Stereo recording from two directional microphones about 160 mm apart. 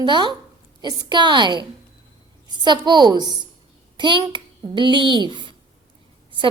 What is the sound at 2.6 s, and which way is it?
A child's voice, 30° right (ahead or behind).